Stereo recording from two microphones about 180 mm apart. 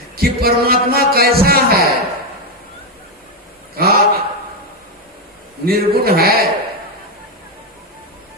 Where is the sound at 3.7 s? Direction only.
55° right (ahead or behind).